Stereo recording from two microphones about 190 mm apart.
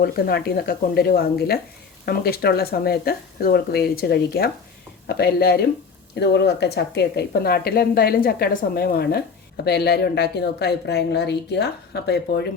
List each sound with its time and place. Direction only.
0.0 s speech: 55° left (ahead or behind)